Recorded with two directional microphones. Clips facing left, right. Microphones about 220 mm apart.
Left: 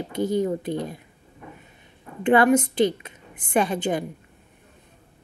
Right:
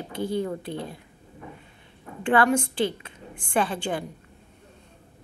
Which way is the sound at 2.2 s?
20° left (ahead or behind).